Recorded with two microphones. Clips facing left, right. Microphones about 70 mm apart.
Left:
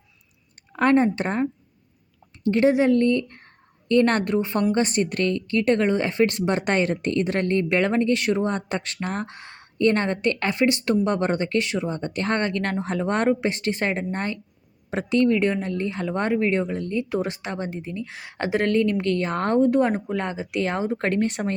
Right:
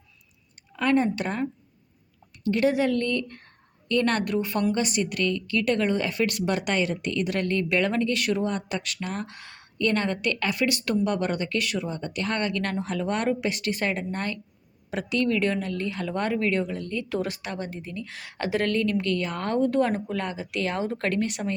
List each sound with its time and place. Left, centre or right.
0.7 s a woman's voice: left
19.6 s speech: left